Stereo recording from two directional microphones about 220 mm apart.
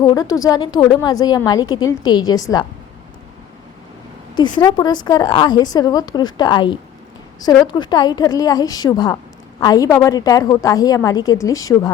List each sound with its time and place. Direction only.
0.0 s a woman's voice: 15° left (ahead or behind)
4.4 s a woman's voice: 20° left (ahead or behind)